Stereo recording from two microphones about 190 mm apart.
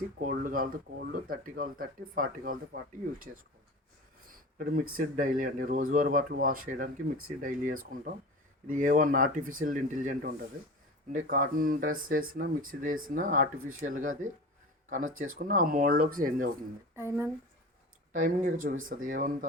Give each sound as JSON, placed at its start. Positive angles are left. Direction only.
{"t": 0.2, "sound": "speech", "side_deg": -45}
{"t": 4.3, "sound": "speech", "side_deg": -50}
{"t": 15.1, "sound": "speech", "side_deg": -90}
{"t": 15.4, "sound": "speech", "side_deg": -50}
{"t": 17.0, "sound": "speech", "side_deg": -15}
{"t": 18.1, "sound": "speech", "side_deg": -45}